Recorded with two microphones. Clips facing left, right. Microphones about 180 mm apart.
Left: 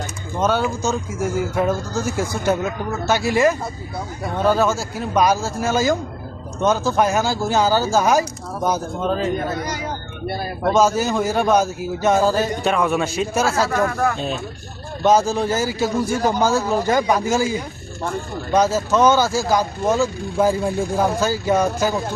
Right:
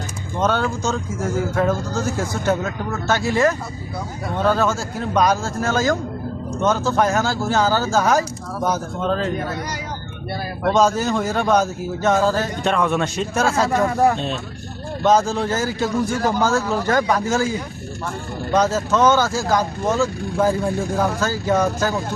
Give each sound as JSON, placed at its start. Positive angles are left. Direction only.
{"t": 0.3, "sound": "speech", "side_deg": 5}
{"t": 10.7, "sound": "speech", "side_deg": 5}
{"t": 13.8, "sound": "speech", "side_deg": -20}
{"t": 15.0, "sound": "speech", "side_deg": 10}
{"t": 16.1, "sound": "speech", "side_deg": 20}
{"t": 18.5, "sound": "speech", "side_deg": 10}